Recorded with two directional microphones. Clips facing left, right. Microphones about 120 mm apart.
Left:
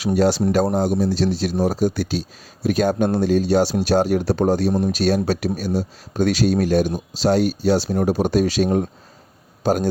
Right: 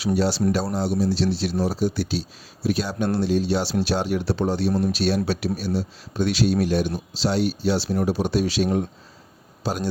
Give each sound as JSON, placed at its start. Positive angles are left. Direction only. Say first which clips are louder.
{"t": 0.2, "sound": "speech", "louder": "left 8 dB", "side_deg": 50}